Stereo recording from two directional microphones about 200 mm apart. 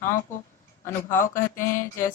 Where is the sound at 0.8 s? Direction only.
10° left (ahead or behind).